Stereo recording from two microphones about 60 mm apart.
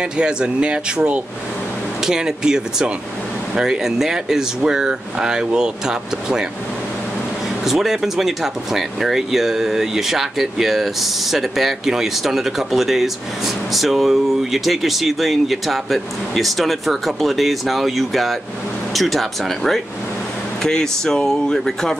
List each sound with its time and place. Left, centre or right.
0.2 s speech: centre
7.6 s speech: centre